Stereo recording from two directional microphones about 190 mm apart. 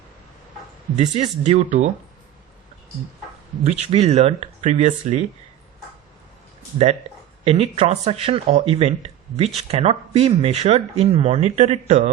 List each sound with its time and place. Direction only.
0.9 s speech: 35° right (ahead or behind)
3.8 s speech: 35° right (ahead or behind)
7.4 s speech: 30° right (ahead or behind)